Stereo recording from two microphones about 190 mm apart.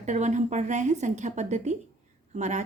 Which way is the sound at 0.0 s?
40° right (ahead or behind).